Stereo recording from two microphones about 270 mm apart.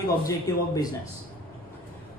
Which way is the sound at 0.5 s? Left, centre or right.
Centre.